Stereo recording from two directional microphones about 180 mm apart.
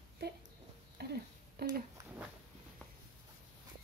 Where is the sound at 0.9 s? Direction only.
60° right (ahead or behind).